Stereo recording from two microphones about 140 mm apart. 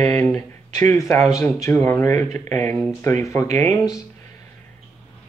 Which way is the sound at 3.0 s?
20° left (ahead or behind).